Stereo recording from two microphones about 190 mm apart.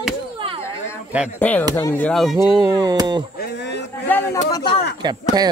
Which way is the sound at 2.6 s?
20° right (ahead or behind).